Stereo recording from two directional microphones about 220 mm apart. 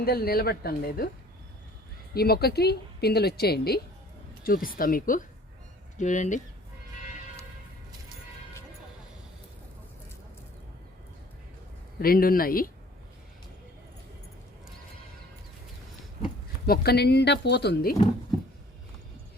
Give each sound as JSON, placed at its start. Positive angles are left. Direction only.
{"t": 0.0, "sound": "a woman's voice", "side_deg": 45}
{"t": 2.1, "sound": "a woman's voice", "side_deg": 45}
{"t": 11.9, "sound": "speech", "side_deg": 40}
{"t": 16.6, "sound": "a woman's voice", "side_deg": 45}